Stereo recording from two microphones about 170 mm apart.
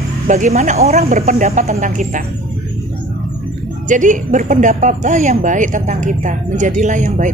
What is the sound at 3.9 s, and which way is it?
Speech, 50° right (ahead or behind).